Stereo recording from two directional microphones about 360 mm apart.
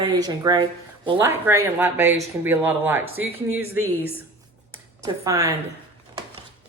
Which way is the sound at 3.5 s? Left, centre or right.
Right.